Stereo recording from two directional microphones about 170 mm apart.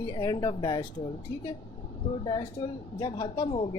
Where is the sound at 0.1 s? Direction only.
25° left (ahead or behind).